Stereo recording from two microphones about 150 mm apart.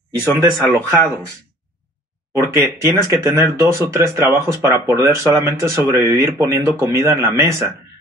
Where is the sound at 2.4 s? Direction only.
20° right (ahead or behind).